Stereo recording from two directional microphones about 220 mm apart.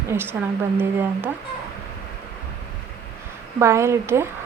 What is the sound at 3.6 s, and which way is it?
Speech, 10° right (ahead or behind).